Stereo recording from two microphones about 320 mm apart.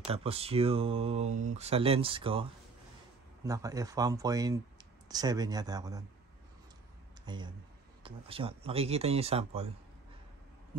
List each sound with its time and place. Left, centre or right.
0.0 s speech: centre
3.4 s speech: centre
7.2 s speech: centre